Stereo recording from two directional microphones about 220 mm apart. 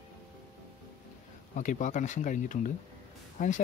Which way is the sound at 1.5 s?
35° left (ahead or behind).